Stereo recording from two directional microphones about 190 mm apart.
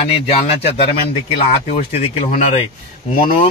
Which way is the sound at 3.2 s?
45° left (ahead or behind).